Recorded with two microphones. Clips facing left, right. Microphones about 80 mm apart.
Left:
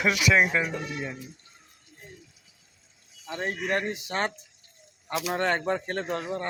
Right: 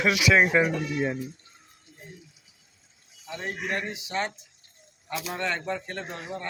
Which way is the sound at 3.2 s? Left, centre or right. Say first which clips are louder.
Left 3 dB; left.